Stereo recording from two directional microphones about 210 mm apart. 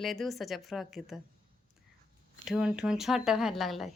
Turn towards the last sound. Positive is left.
turn(degrees=0)  # may be behind; listen again after turning